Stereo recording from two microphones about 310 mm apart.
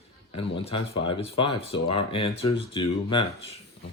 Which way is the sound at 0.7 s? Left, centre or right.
Centre.